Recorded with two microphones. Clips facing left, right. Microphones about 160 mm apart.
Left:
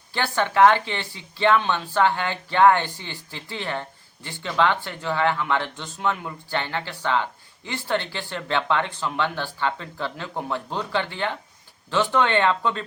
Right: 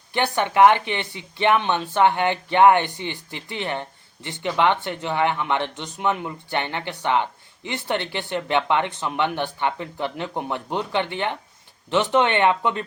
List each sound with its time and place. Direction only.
0.1 s speech: 20° right (ahead or behind)